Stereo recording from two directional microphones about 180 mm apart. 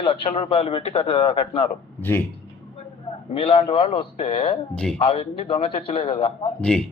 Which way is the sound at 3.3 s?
30° left (ahead or behind).